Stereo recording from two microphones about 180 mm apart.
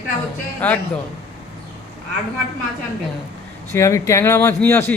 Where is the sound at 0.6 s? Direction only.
10° left (ahead or behind).